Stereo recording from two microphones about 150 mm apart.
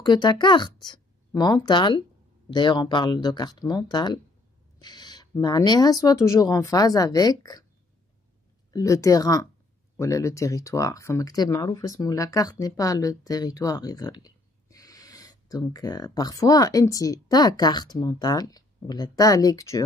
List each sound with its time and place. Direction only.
0.0 s a woman's voice: 30° left (ahead or behind)
8.7 s speech: 20° left (ahead or behind)